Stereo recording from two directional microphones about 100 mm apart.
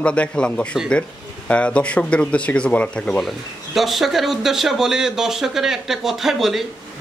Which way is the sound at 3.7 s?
Centre (ahead or behind).